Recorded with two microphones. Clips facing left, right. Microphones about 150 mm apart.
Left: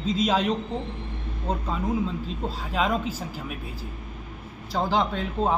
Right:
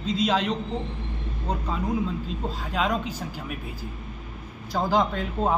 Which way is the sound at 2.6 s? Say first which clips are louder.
Left 1 dB; 5° left (ahead or behind).